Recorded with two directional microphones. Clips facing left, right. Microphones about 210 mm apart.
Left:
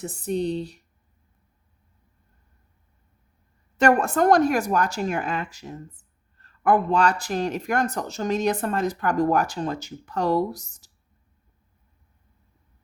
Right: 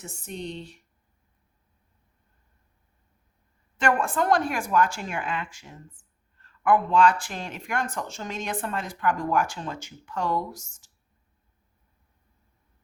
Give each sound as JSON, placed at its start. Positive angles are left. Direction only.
{"t": 0.0, "sound": "speech", "side_deg": 35}
{"t": 3.8, "sound": "speech", "side_deg": 40}